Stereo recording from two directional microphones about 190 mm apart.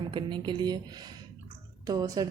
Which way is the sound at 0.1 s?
25° right (ahead or behind).